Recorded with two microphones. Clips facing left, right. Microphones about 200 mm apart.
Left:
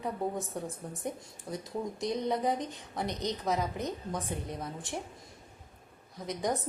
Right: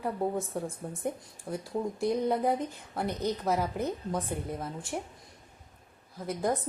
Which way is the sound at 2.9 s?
5° right (ahead or behind).